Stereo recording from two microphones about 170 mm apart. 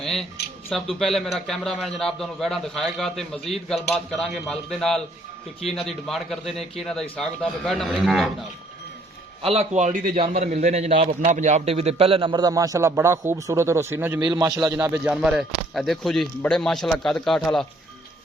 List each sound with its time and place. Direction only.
0.0 s a sound: centre (ahead or behind)
0.7 s a man's voice: centre (ahead or behind)
9.4 s a man's voice: 35° right (ahead or behind); by 14.2 s 10° right (ahead or behind)
14.2 s a man's voice: 25° right (ahead or behind)
15.1 s a man's voice: centre (ahead or behind)